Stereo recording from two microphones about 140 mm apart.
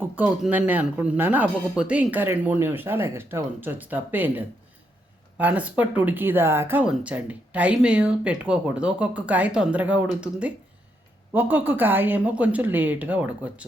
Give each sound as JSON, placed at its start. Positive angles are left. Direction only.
{"t": 0.4, "sound": "speech", "side_deg": -10}